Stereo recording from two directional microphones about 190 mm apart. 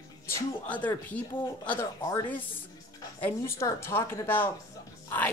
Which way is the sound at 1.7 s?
15° left (ahead or behind).